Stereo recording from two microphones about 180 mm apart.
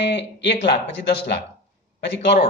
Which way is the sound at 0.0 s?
75° left (ahead or behind).